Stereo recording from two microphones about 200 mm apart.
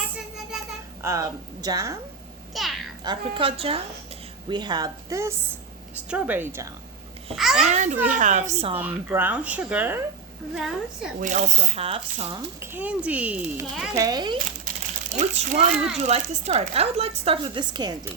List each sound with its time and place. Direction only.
1.0 s speech: 15° right (ahead or behind)
2.5 s a child's voice: centre (ahead or behind)
3.0 s a woman's voice: 25° right (ahead or behind); by 7.6 s centre (ahead or behind)
7.6 s speech: 35° right (ahead or behind)
8.8 s a woman's voice: 10° right (ahead or behind)
11.2 s speech: 40° right (ahead or behind)
12.4 s speech: 10° right (ahead or behind)
13.9 s speech: 20° right (ahead or behind)
15.1 s speech: 35° right (ahead or behind); by 18.1 s 20° right (ahead or behind)